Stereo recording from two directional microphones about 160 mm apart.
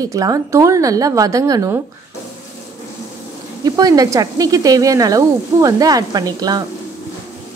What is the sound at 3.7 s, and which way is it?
A woman's voice, 25° right (ahead or behind).